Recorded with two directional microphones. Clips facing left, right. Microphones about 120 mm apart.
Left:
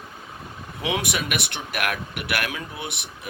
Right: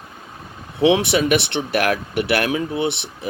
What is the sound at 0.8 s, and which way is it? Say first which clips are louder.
Speech: right 11 dB; 30° right (ahead or behind).